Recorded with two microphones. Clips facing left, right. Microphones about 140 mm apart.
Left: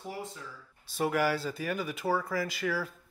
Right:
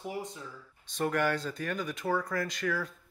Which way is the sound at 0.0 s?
15° right (ahead or behind).